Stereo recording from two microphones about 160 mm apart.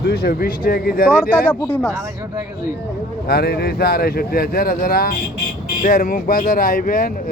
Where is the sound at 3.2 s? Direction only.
80° left.